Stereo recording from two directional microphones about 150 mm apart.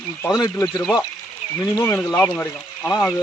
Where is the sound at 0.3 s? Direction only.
20° left (ahead or behind).